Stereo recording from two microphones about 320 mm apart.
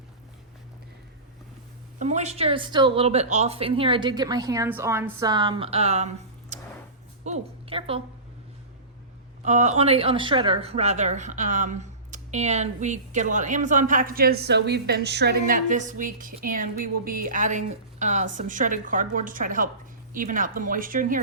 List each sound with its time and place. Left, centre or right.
2.0 s a woman's voice: right
7.3 s a sound: centre
9.4 s speech: right